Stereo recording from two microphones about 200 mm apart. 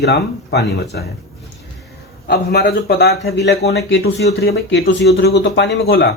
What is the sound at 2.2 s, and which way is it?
A man's voice, 55° left (ahead or behind).